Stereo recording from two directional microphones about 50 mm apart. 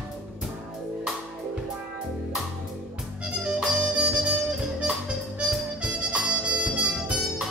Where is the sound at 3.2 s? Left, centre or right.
Centre.